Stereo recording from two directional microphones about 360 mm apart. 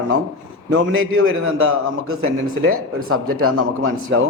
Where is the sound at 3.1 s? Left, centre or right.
Right.